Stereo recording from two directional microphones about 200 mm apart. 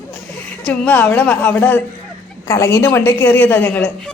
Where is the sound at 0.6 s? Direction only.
10° left (ahead or behind).